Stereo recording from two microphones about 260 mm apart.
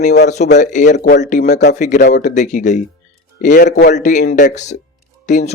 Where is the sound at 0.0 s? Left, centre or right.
Left.